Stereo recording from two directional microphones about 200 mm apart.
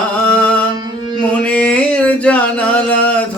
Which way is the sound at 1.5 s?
5° left (ahead or behind).